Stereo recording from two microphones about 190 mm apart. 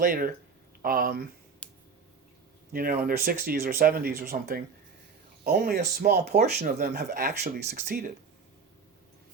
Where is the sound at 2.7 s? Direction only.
50° right (ahead or behind).